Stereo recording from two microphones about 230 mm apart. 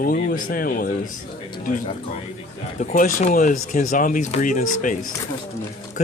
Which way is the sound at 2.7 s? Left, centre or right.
Left.